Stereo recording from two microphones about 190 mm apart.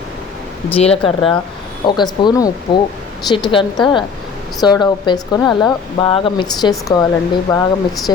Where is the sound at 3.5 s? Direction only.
25° left (ahead or behind).